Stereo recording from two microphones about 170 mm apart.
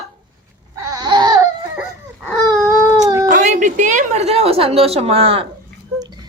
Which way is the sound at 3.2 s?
45° right (ahead or behind).